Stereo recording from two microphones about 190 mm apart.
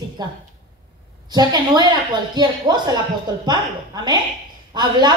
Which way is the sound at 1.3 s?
20° right (ahead or behind).